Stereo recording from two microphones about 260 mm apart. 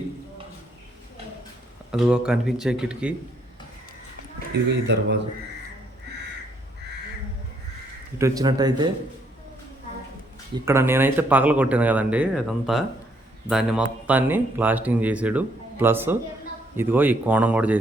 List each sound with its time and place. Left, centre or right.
1.9 s speech: centre
4.7 s speech: right
8.2 s speech: centre
10.7 s speech: centre